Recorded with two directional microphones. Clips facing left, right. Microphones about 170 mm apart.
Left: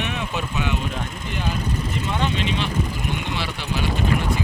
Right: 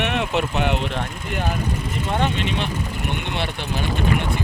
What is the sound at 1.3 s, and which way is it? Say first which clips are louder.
Speech: right 2 dB; 50° right (ahead or behind).